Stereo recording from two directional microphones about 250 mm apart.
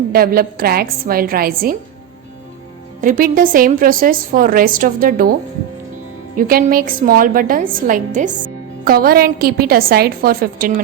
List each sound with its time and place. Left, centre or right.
0.1 s a woman's voice: right
3.0 s a woman's voice: right
6.3 s a woman's voice: right